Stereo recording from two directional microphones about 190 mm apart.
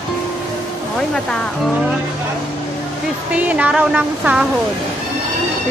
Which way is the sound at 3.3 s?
5° right (ahead or behind).